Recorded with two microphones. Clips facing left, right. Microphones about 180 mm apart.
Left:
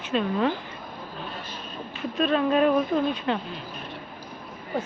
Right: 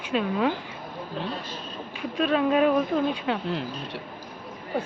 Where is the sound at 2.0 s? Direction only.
10° right (ahead or behind).